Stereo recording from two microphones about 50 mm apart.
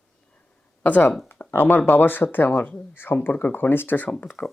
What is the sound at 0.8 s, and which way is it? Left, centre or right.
Speech, left.